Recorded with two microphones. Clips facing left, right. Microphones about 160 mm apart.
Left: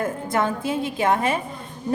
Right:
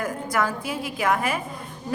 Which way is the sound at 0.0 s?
25° left (ahead or behind).